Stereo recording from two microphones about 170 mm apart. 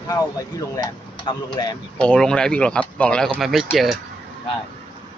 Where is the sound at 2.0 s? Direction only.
5° left (ahead or behind).